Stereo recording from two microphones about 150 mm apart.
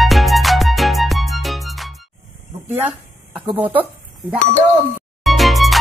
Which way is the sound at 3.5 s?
10° right (ahead or behind).